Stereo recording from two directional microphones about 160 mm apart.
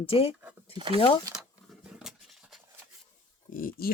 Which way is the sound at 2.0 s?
Centre (ahead or behind).